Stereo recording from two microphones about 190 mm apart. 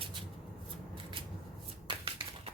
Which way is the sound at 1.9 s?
25° right (ahead or behind).